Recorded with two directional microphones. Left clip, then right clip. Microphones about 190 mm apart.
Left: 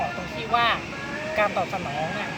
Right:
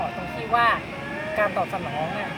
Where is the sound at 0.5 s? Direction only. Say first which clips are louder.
Right 2 dB; 10° right (ahead or behind).